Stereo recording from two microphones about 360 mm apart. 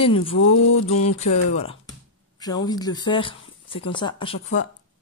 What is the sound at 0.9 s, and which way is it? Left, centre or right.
Music, left.